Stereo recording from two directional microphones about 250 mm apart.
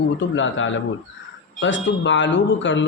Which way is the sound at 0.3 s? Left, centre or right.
Left.